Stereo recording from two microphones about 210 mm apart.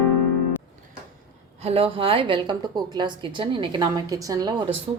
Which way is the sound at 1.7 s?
25° right (ahead or behind).